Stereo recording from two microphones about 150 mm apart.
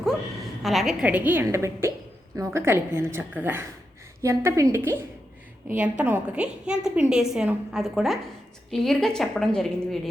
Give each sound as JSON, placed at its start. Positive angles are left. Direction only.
{"t": 0.6, "sound": "a woman's voice", "side_deg": 0}